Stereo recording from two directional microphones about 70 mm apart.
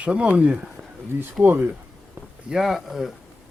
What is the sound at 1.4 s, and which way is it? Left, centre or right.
Speech, right.